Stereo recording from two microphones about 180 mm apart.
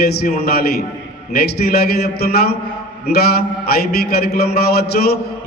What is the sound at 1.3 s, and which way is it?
A man's voice, 60° left (ahead or behind).